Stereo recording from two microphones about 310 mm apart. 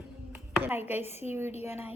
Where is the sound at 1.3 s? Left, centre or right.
Centre.